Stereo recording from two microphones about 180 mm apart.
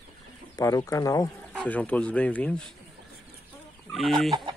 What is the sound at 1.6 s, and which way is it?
Speech, 10° left (ahead or behind).